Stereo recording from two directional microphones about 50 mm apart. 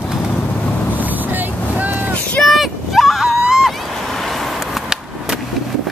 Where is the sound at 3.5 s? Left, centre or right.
Centre.